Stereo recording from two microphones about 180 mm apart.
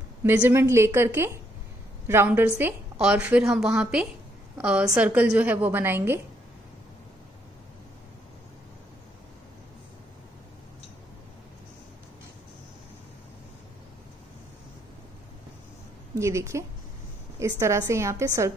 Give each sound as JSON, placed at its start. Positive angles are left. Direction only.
{"t": 0.2, "sound": "a woman's voice", "side_deg": -10}
{"t": 16.2, "sound": "a woman's voice", "side_deg": -15}